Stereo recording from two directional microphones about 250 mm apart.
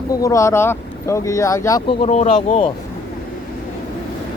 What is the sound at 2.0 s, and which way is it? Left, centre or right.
Speech, left.